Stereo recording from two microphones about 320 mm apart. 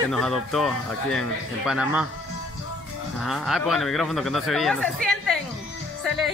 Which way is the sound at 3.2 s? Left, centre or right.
Centre.